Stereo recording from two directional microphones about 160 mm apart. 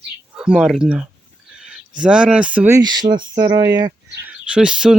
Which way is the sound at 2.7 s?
25° right (ahead or behind).